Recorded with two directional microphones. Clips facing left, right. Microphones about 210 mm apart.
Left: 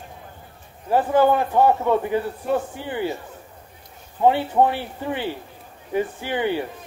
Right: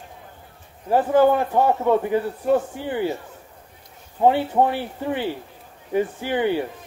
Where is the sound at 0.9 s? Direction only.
45° right (ahead or behind).